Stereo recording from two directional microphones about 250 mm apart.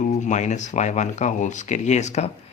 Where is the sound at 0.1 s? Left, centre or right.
Left.